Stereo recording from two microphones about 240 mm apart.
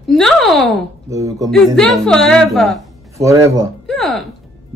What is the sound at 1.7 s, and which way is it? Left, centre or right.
A woman's voice, centre.